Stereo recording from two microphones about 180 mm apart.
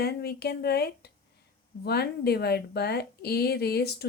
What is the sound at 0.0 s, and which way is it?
Speech, 60° left (ahead or behind).